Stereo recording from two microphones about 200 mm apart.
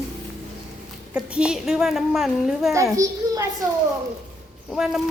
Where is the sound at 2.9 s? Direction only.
15° right (ahead or behind).